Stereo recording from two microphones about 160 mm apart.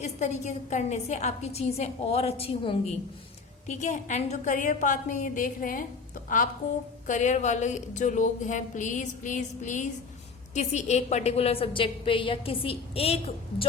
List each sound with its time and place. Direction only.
0.0 s a woman's voice: 45° left (ahead or behind)